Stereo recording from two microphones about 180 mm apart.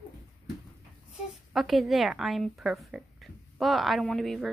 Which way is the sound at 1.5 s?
Centre (ahead or behind).